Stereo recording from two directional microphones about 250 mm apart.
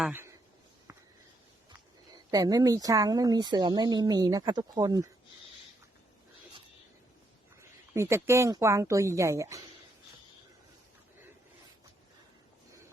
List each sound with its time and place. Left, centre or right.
0.0 s a sound: centre
2.1 s speech: centre
7.9 s speech: centre